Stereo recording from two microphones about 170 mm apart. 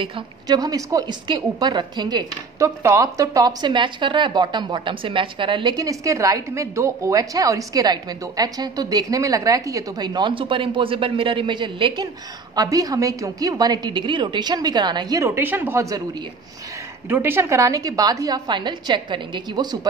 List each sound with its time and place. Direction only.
0.0 s a woman's voice: 25° right (ahead or behind)
17.1 s a woman's voice: 15° right (ahead or behind)